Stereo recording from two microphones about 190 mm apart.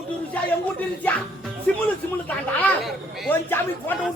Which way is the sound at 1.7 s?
5° left (ahead or behind).